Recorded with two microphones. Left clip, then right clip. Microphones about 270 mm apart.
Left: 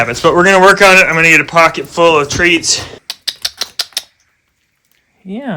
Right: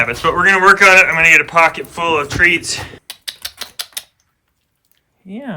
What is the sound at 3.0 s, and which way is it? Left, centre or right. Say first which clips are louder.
Typewriter: left 8 dB; left.